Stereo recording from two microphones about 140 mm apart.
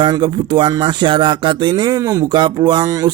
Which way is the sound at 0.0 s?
35° right (ahead or behind).